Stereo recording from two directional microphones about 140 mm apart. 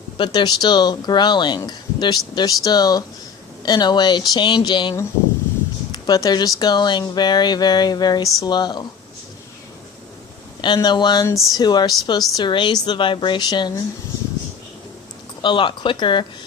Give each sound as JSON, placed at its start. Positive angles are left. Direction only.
{"t": 0.2, "sound": "speech", "side_deg": 30}
{"t": 10.6, "sound": "speech", "side_deg": 30}
{"t": 15.4, "sound": "speech", "side_deg": 35}